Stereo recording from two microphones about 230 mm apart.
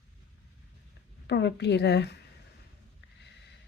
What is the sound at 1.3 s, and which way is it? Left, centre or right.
Speech, left.